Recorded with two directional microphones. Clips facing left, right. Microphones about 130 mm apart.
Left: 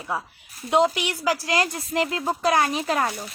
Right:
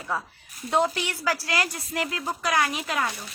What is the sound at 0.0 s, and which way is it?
A woman's voice, 15° left (ahead or behind).